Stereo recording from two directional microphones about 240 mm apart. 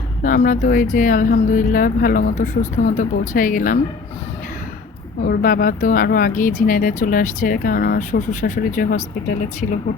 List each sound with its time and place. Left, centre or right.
0.2 s speech: left
5.2 s speech: left